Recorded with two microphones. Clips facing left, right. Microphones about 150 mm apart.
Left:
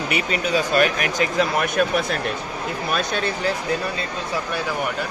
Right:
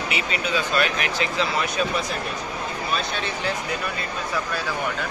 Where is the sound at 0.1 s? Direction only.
40° left (ahead or behind); by 2.1 s 60° left (ahead or behind).